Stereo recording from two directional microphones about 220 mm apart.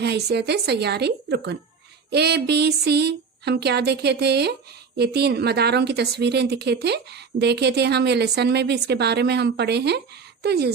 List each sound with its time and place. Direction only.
0.0 s a woman's voice: 50° right (ahead or behind)